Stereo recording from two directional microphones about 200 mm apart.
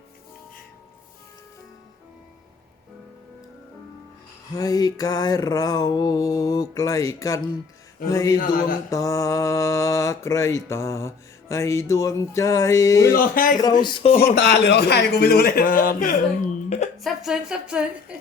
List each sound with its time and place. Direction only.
4.5 s mantra: 20° left (ahead or behind)
13.1 s a man's voice: 45° left (ahead or behind)
13.8 s speech: 25° left (ahead or behind)
14.3 s a man's voice: 55° left (ahead or behind)
16.6 s a sound: 35° left (ahead or behind)
17.0 s a woman's voice: centre (ahead or behind)